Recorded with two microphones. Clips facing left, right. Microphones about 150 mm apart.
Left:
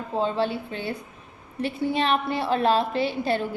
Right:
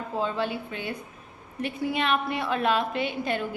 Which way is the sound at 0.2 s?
30° left (ahead or behind).